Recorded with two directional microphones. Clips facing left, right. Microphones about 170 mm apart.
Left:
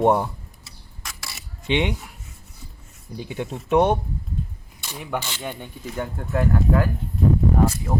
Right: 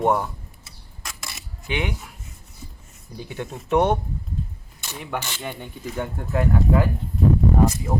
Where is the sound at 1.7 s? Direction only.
20° left (ahead or behind).